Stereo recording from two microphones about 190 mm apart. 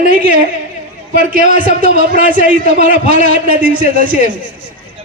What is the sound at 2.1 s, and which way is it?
A man's voice, 50° right (ahead or behind).